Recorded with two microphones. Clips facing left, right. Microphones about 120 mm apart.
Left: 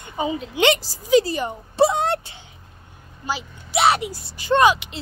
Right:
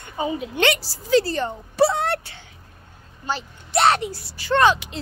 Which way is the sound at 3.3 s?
5° left (ahead or behind).